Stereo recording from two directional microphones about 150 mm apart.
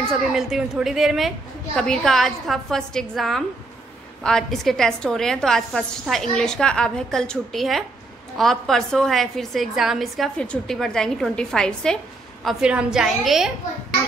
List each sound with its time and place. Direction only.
0.1 s a woman's voice: centre (ahead or behind)